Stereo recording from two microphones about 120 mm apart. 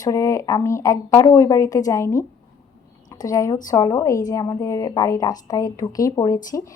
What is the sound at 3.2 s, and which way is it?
Speech, 30° left (ahead or behind).